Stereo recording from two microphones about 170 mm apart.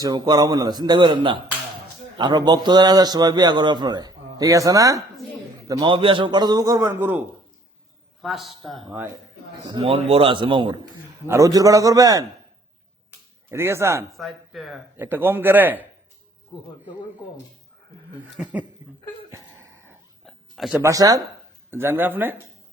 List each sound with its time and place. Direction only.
0.0 s a man's voice: 20° right (ahead or behind)
8.2 s speech: centre (ahead or behind)
9.6 s a man's voice: 30° right (ahead or behind)
11.3 s a man's voice: 20° right (ahead or behind)
13.5 s a man's voice: 15° right (ahead or behind)
14.2 s speech: centre (ahead or behind)
14.9 s a man's voice: 10° right (ahead or behind)
18.3 s a man's voice: 5° right (ahead or behind)
19.3 s a sound: 15° right (ahead or behind)
20.2 s a sound: centre (ahead or behind)
20.7 s a man's voice: 20° right (ahead or behind)